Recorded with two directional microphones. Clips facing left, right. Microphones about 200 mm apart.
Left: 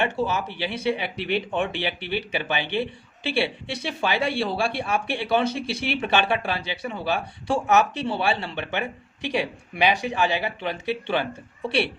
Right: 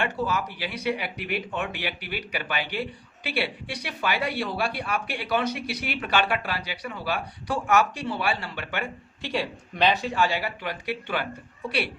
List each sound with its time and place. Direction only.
0.0 s speech: 25° left (ahead or behind)